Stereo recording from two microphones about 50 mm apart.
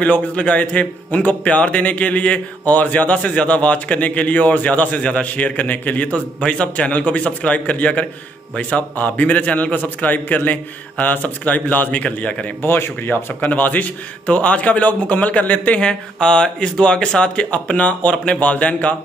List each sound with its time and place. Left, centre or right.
0.0 s a man's voice: left
5.0 s speech: centre
5.3 s a man's voice: left
12.0 s a man's voice: left
12.6 s speech: left
13.5 s a man's voice: left
15.8 s speech: centre
18.1 s a man's voice: centre